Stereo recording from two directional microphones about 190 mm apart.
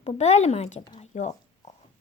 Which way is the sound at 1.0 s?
40° left (ahead or behind).